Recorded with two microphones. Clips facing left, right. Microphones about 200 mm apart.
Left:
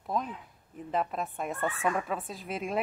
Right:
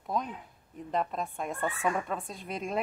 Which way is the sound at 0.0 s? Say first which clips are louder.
Even; centre (ahead or behind).